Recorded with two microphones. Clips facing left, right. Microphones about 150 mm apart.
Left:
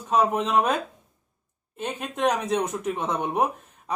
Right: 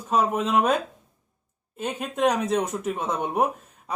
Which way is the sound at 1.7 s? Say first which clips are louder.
Right 2 dB; 5° right (ahead or behind).